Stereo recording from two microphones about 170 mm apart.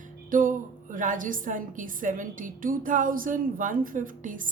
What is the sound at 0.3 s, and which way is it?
A woman's voice, 50° right (ahead or behind).